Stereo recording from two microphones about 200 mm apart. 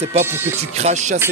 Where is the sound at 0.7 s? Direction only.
35° right (ahead or behind).